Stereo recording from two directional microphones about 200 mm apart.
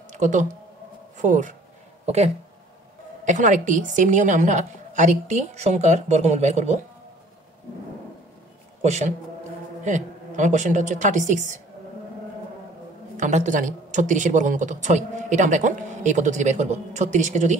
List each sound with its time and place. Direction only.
0.1 s speech: 40° right (ahead or behind)
8.8 s speech: 35° right (ahead or behind)
13.2 s speech: 40° right (ahead or behind)